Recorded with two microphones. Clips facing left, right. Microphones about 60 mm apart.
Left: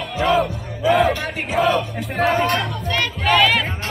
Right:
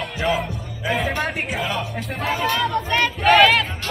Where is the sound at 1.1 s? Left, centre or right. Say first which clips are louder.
Right 2 dB; centre.